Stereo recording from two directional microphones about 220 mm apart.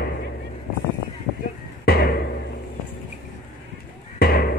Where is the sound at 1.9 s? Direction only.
45° left (ahead or behind).